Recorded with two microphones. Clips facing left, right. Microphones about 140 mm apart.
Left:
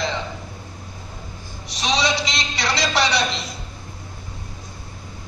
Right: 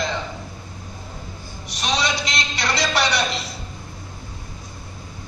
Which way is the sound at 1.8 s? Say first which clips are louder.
Left 2 dB; centre (ahead or behind).